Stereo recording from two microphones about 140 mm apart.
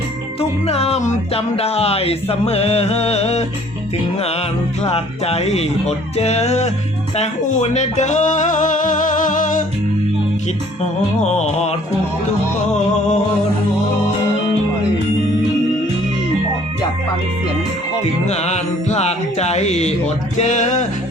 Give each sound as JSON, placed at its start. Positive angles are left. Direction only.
{"t": 0.3, "sound": "music", "side_deg": 45}
{"t": 7.2, "sound": "speech", "side_deg": 60}
{"t": 11.2, "sound": "music", "side_deg": 55}
{"t": 18.0, "sound": "music", "side_deg": 50}